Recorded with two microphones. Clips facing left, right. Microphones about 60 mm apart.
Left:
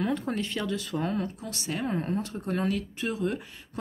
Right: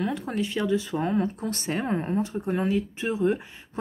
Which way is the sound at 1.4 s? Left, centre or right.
Right.